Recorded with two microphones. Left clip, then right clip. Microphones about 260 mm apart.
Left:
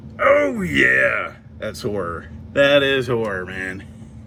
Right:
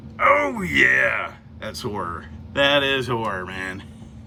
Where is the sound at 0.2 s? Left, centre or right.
Centre.